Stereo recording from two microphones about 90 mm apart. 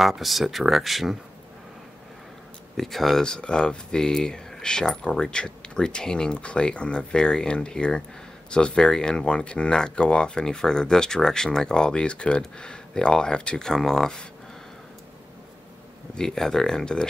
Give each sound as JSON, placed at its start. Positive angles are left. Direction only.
{"t": 0.0, "sound": "speech", "side_deg": 0}
{"t": 2.8, "sound": "speech", "side_deg": 0}
{"t": 16.2, "sound": "speech", "side_deg": 5}